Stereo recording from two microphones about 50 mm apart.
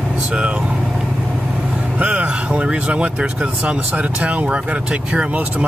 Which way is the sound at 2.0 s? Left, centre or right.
Right.